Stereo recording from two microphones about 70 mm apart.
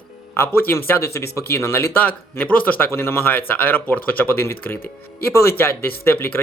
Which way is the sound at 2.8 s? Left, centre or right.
Left.